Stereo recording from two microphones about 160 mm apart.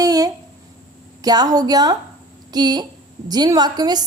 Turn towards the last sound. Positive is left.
turn(degrees=-25)  # may be behind; listen again after turning